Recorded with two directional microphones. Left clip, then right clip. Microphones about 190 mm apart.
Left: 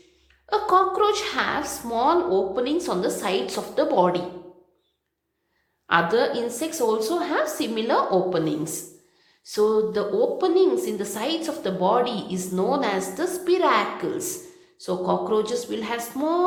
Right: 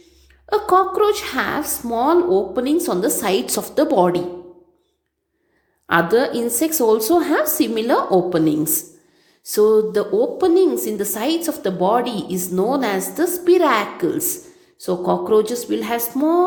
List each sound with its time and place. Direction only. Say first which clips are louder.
0.5 s a woman's voice: right 4 dB; 35° right (ahead or behind)
5.9 s a woman's voice: right 4 dB; 35° right (ahead or behind)